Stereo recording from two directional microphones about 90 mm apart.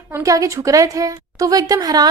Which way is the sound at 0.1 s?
35° right (ahead or behind).